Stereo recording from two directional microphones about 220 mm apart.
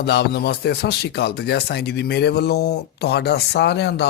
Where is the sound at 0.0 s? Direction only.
50° left (ahead or behind).